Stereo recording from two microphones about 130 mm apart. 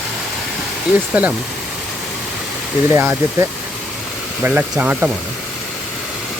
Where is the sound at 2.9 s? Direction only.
20° right (ahead or behind).